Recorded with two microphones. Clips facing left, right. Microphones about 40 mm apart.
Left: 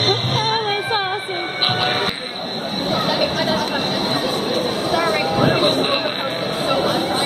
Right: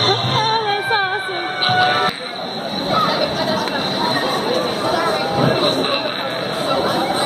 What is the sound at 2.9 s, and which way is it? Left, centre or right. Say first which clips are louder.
Chatter: right 4 dB; centre.